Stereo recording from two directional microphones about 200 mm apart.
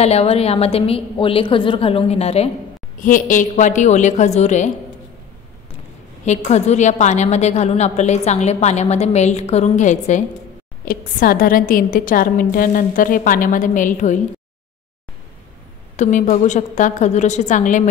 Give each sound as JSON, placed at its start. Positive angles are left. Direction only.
{"t": 0.0, "sound": "a woman's voice", "side_deg": 30}
{"t": 3.0, "sound": "a woman's voice", "side_deg": 40}
{"t": 6.2, "sound": "a woman's voice", "side_deg": 35}
{"t": 16.0, "sound": "a woman's voice", "side_deg": 40}